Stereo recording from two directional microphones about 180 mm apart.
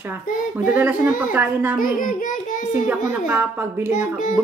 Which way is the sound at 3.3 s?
10° right (ahead or behind).